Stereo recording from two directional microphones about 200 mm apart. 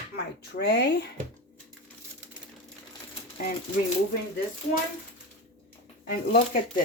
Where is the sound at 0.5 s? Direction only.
55° left (ahead or behind).